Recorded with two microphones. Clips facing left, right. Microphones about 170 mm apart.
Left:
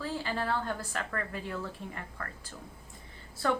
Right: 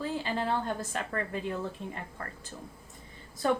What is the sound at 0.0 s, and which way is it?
A woman's voice, 20° right (ahead or behind).